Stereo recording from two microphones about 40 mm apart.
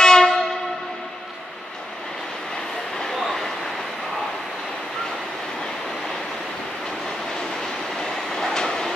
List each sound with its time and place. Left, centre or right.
0.0 s train: centre
3.0 s vehicle: centre
7.6 s train: centre